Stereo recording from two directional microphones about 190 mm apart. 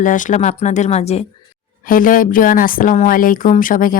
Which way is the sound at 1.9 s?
45° left (ahead or behind).